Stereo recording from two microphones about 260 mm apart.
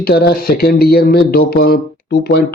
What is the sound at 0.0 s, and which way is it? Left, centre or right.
Speech, left.